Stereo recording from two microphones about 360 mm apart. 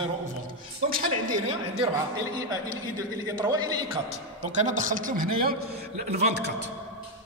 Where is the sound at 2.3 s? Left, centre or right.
Centre.